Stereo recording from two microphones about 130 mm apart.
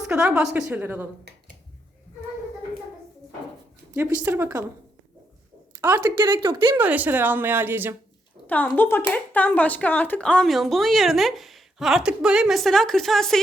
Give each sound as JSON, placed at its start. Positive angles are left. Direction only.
{"t": 0.1, "sound": "speech", "side_deg": -5}
{"t": 3.9, "sound": "speech", "side_deg": -15}
{"t": 5.8, "sound": "speech", "side_deg": -15}
{"t": 6.3, "sound": "speech", "side_deg": -35}
{"t": 6.7, "sound": "speech", "side_deg": -10}
{"t": 8.4, "sound": "speech", "side_deg": 10}